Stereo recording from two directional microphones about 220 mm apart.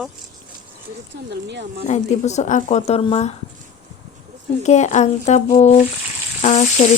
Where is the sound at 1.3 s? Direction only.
50° right (ahead or behind).